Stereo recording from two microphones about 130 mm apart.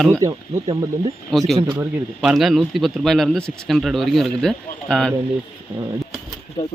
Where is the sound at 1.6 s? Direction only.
35° right (ahead or behind).